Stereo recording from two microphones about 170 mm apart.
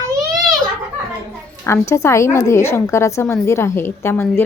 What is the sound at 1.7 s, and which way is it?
A woman's voice, 15° left (ahead or behind).